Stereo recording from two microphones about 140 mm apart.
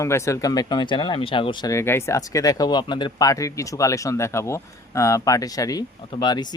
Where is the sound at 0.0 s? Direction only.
20° left (ahead or behind).